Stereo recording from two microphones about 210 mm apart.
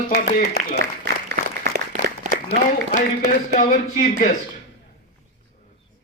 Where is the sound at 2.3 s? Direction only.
35° right (ahead or behind).